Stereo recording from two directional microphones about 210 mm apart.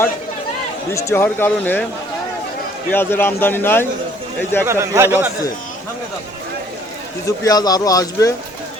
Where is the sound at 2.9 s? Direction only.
10° left (ahead or behind).